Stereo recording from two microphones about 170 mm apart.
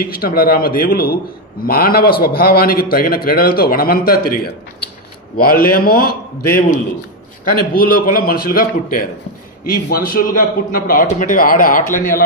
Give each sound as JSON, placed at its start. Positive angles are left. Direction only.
{"t": 0.0, "sound": "a man's voice", "side_deg": 60}
{"t": 5.4, "sound": "a man's voice", "side_deg": 60}